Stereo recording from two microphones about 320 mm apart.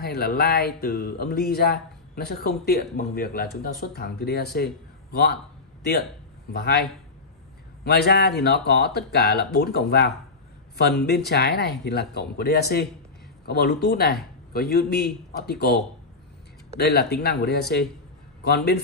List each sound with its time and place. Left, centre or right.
0.0 s speech: left
6.5 s speech: left